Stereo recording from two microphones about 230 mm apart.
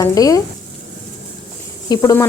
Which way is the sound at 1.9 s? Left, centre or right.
Centre.